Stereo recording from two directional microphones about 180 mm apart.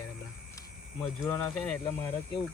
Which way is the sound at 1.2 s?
15° left (ahead or behind).